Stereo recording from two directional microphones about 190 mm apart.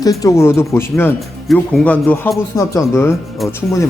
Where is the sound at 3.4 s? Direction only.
Centre (ahead or behind).